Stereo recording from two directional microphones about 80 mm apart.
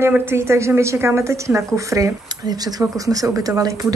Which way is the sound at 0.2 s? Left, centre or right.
Right.